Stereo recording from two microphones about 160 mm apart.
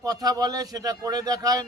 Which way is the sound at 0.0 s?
25° right (ahead or behind).